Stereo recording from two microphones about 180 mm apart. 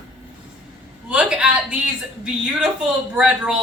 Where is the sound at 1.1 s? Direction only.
5° right (ahead or behind).